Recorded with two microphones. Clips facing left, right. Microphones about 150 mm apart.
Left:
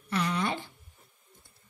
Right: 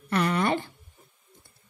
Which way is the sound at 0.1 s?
60° right (ahead or behind).